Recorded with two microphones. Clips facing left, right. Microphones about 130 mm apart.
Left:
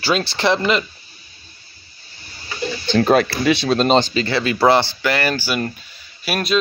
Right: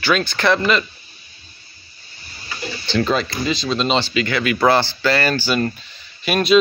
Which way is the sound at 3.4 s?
65° left (ahead or behind).